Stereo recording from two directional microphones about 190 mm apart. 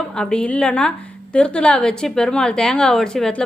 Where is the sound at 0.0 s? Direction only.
5° left (ahead or behind).